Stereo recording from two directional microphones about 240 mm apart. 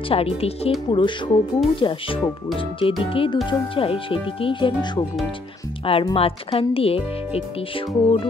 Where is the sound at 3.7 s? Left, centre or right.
Left.